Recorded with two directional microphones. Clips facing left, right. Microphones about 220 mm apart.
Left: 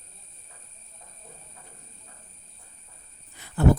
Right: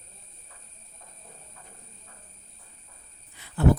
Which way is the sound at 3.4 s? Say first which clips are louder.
Left 3 dB; 45° left (ahead or behind).